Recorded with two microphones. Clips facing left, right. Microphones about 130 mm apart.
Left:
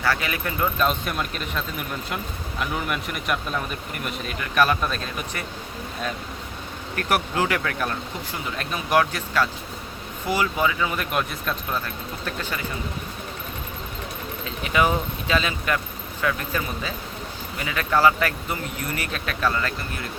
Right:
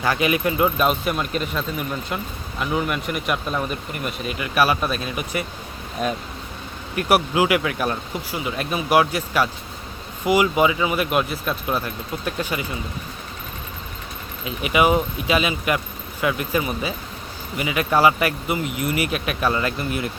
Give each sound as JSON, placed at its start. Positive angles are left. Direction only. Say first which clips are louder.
{"t": 0.0, "sound": "speech", "louder": "right 5 dB", "side_deg": -15}
{"t": 14.4, "sound": "speech", "louder": "right 4 dB", "side_deg": -10}